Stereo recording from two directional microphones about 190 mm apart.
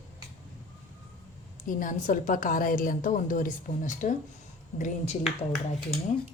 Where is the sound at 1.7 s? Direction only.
45° left (ahead or behind).